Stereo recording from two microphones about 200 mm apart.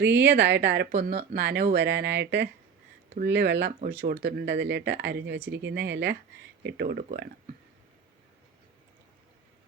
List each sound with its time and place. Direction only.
0.3 s speech: 60° right (ahead or behind)
0.9 s speech: 40° right (ahead or behind); by 7.3 s 55° right (ahead or behind)